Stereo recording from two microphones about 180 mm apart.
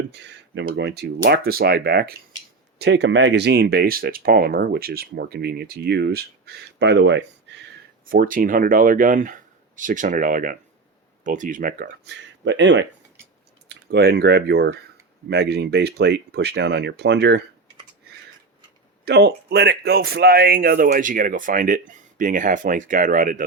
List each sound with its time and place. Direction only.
0.1 s speech: 70° right (ahead or behind)
2.7 s speech: 70° right (ahead or behind)
8.1 s speech: 50° right (ahead or behind)
12.0 s speech: 80° right
13.7 s speech: 65° right (ahead or behind)
19.0 s speech: 65° right (ahead or behind); by 23.5 s 45° right (ahead or behind)